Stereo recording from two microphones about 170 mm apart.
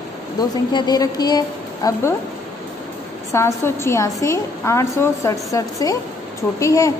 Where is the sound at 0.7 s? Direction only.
25° left (ahead or behind).